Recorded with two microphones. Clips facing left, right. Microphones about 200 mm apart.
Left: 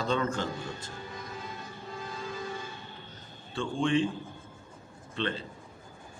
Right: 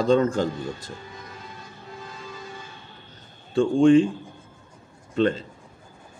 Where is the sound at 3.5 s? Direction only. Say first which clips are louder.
Right 12 dB; 45° right (ahead or behind).